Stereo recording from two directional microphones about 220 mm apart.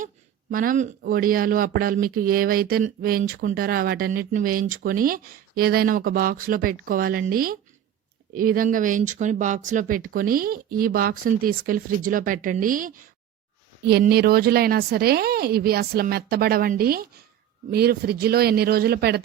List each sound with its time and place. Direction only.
0.5 s a woman's voice: 40° right (ahead or behind)